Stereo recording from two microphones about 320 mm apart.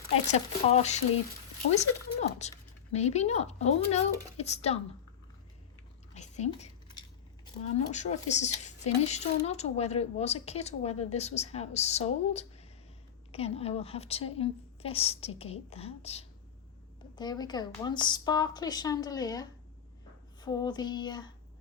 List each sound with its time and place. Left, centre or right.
0.3 s speech: centre
6.1 s a sound: left
7.4 s a woman's voice: left